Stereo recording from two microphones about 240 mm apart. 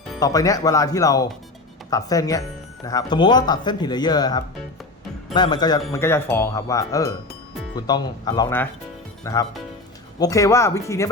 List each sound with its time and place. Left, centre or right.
0.2 s speech: centre